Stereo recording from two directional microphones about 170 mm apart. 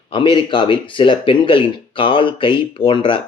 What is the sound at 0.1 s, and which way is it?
Speech, 30° left (ahead or behind).